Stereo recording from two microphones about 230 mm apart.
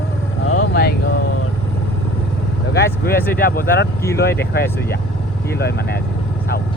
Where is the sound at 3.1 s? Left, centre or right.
Centre.